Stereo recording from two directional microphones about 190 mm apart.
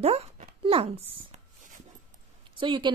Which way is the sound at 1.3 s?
40° right (ahead or behind).